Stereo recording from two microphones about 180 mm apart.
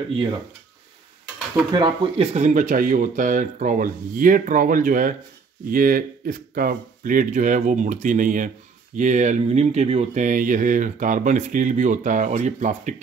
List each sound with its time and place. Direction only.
1.7 s speech: 25° right (ahead or behind)
2.3 s speech: 45° right (ahead or behind)